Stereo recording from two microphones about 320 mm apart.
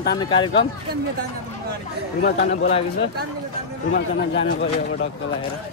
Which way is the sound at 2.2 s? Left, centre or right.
Left.